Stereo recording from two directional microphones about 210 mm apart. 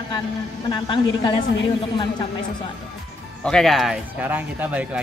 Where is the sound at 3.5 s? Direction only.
Centre (ahead or behind).